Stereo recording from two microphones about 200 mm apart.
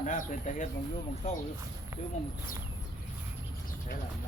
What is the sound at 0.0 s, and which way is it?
Speech, 40° left (ahead or behind).